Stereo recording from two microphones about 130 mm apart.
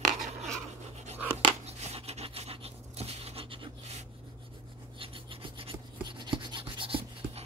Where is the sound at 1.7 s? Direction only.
55° right (ahead or behind).